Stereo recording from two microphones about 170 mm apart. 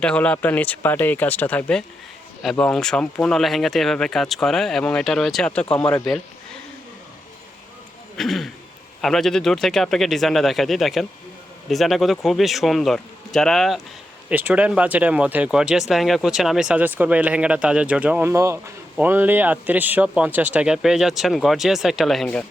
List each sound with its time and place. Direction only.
0.0 s speech: 5° left (ahead or behind)
8.1 s speech: centre (ahead or behind)